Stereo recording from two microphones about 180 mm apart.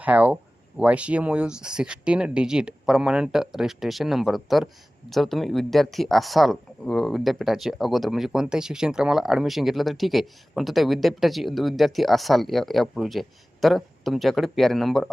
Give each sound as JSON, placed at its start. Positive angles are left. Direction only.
{"t": 0.0, "sound": "speech", "side_deg": -5}